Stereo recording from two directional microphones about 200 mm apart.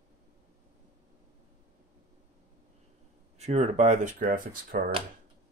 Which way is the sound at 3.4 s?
35° right (ahead or behind).